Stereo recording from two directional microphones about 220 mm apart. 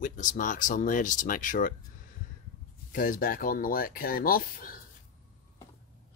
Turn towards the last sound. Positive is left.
turn(degrees=40)  # may be behind; listen again after turning